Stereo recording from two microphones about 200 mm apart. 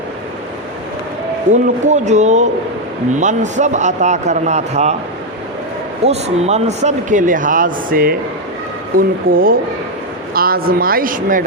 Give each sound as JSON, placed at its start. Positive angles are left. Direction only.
{"t": 1.5, "sound": "speech", "side_deg": -40}
{"t": 6.1, "sound": "speech", "side_deg": -30}